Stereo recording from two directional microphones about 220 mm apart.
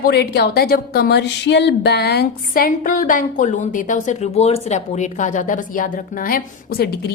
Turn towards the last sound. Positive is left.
turn(degrees=45)  # may be behind; listen again after turning